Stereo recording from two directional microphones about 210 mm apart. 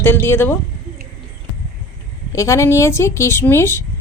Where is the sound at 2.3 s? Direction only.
15° left (ahead or behind).